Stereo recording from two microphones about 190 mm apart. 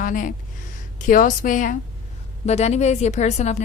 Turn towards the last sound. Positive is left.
turn(degrees=35)  # may be behind; listen again after turning